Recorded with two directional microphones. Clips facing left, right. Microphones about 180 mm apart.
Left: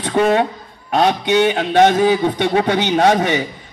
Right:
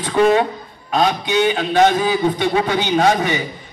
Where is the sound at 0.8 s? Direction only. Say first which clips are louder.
Left 2 dB; 65° left (ahead or behind).